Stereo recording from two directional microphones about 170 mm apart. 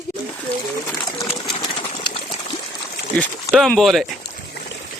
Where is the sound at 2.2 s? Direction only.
30° left (ahead or behind).